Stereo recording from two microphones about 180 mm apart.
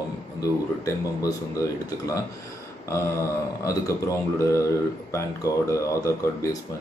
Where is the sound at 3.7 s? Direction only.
20° left (ahead or behind).